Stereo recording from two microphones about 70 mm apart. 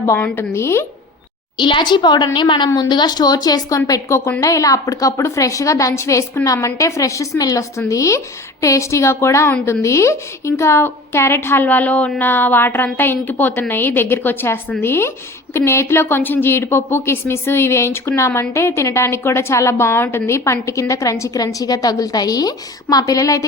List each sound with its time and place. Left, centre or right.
0.0 s a woman's voice: left
1.5 s a woman's voice: left